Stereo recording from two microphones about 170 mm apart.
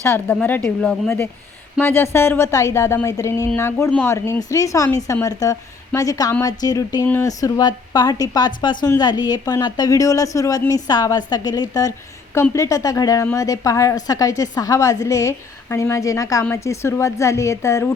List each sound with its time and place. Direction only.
0.0 s a woman's voice: 10° left (ahead or behind)